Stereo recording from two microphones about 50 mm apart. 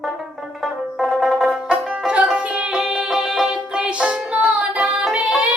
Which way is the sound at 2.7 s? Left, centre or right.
Centre.